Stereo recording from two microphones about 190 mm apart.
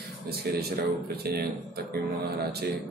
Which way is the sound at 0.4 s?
55° right (ahead or behind).